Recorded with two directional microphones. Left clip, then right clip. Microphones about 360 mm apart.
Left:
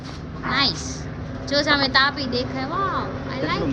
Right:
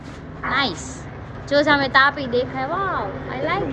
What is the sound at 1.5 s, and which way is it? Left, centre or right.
A woman's voice, centre.